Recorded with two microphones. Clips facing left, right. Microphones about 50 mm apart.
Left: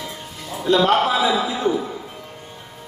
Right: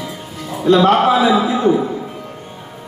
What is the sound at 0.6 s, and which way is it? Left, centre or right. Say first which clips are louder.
Speech: right 5 dB; right.